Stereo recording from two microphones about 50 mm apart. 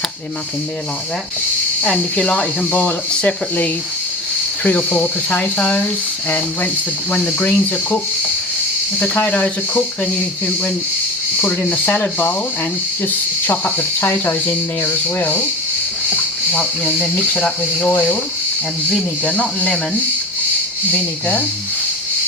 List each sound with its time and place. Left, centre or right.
1.9 s speech: centre
4.9 s speech: left
6.2 s speech: left
9.2 s speech: left
13.1 s speech: left
16.8 s speech: left
19.2 s speech: left
20.9 s speech: left